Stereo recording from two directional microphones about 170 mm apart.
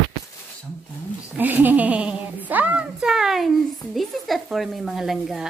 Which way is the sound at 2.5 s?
10° right (ahead or behind).